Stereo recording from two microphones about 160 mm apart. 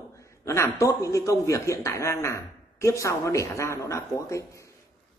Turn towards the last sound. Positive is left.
turn(degrees=20)  # may be behind; listen again after turning